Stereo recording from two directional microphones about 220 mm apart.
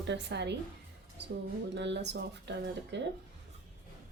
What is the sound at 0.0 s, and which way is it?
Speech, 50° right (ahead or behind).